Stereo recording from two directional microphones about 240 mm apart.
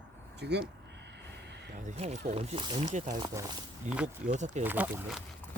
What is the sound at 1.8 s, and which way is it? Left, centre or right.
Speech, right.